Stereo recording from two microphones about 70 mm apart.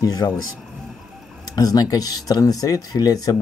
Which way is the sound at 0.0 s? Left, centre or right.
Left.